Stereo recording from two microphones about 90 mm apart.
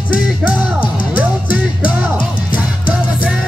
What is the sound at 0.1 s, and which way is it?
Music, 15° right (ahead or behind).